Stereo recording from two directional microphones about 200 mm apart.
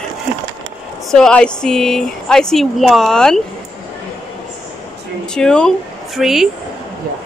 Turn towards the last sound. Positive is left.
turn(degrees=0)  # may be behind; listen again after turning